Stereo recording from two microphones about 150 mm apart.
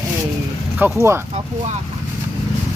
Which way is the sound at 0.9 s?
15° right (ahead or behind).